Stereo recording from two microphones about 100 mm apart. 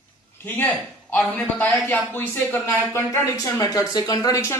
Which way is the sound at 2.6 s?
30° left (ahead or behind).